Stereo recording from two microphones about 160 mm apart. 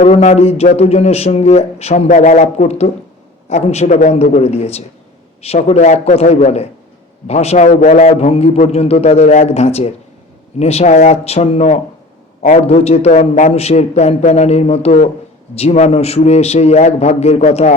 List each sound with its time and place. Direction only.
0.0 s a man's voice: 45° left (ahead or behind)